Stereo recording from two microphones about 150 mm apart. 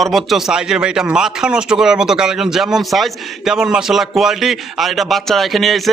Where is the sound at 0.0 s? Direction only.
Centre (ahead or behind).